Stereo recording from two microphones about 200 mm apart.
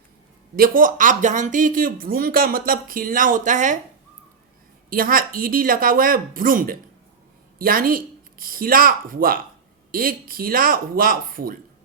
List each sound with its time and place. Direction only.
0.5 s speech: 45° right (ahead or behind)
4.9 s speech: 45° right (ahead or behind)